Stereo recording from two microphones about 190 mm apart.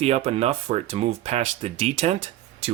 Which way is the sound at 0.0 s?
30° right (ahead or behind).